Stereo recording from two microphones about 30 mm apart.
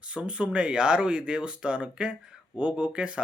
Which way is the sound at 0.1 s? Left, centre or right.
Right.